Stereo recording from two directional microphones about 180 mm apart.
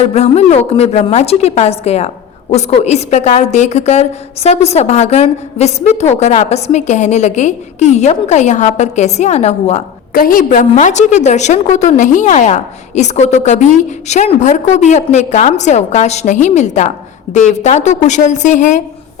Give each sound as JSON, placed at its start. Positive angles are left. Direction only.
{"t": 0.1, "sound": "a woman's voice", "side_deg": 35}
{"t": 10.2, "sound": "a woman's voice", "side_deg": 50}